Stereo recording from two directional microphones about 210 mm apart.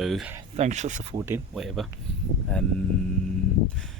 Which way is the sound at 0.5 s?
35° right (ahead or behind).